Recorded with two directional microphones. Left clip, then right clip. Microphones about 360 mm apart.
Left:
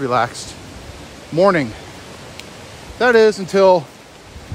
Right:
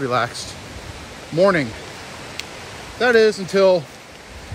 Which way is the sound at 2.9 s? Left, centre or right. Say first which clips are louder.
Left 3 dB; centre.